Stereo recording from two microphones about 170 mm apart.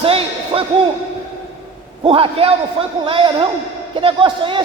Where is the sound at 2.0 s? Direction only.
35° right (ahead or behind).